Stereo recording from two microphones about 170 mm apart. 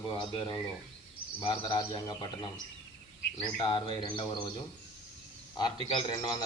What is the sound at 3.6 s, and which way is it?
A man's voice, 30° left (ahead or behind).